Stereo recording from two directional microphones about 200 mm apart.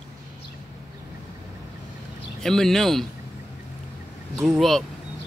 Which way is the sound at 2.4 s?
Centre (ahead or behind).